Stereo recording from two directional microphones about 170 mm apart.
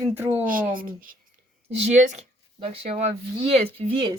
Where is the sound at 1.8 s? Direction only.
45° right (ahead or behind); by 4.1 s 30° right (ahead or behind).